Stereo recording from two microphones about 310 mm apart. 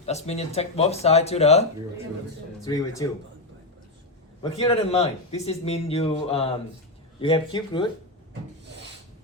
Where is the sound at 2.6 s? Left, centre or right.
Centre.